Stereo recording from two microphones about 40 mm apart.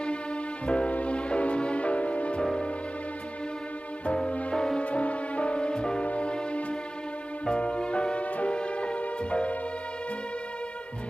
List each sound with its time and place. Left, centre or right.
0.7 s music: left
4.0 s music: left